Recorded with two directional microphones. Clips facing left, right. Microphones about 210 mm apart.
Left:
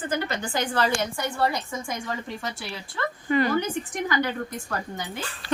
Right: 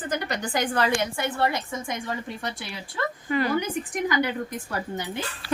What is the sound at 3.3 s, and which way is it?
Speech, 5° right (ahead or behind).